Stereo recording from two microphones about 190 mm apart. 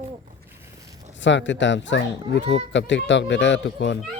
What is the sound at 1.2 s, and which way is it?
Speech, 75° left (ahead or behind).